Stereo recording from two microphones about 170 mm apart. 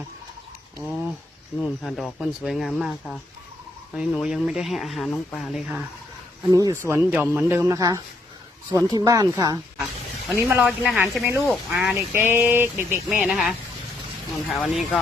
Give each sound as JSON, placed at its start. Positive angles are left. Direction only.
{"t": 1.6, "sound": "speech", "side_deg": 0}
{"t": 6.5, "sound": "speech", "side_deg": -20}
{"t": 9.7, "sound": "a sound", "side_deg": 0}
{"t": 10.3, "sound": "speech", "side_deg": -15}
{"t": 11.9, "sound": "speech", "side_deg": -15}